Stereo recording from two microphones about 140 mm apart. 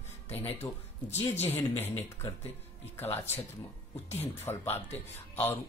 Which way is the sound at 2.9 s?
15° left (ahead or behind).